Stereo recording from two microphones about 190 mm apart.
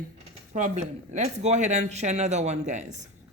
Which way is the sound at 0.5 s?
40° right (ahead or behind).